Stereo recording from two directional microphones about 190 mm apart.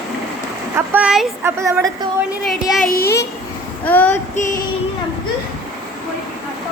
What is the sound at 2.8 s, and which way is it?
Speech, 50° left (ahead or behind).